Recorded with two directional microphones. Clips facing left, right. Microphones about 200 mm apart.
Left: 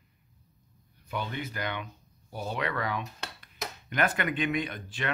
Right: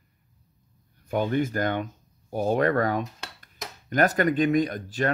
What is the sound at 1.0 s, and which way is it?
Speech, 45° right (ahead or behind).